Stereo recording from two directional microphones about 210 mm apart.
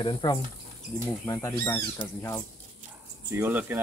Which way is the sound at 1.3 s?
10° left (ahead or behind).